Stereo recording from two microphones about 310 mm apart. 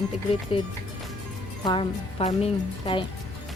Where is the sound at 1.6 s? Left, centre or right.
Centre.